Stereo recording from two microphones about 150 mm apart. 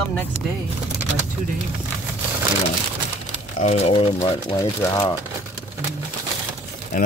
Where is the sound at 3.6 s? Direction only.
50° left (ahead or behind).